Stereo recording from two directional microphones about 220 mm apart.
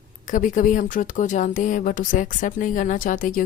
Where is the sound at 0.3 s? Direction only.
35° left (ahead or behind).